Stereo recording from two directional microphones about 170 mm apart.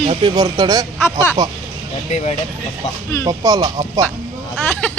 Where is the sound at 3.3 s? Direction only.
20° right (ahead or behind).